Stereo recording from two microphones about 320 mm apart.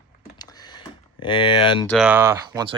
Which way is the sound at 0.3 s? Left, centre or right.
Centre.